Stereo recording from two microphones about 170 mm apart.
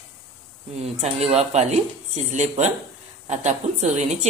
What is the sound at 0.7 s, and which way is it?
Speech, 40° right (ahead or behind).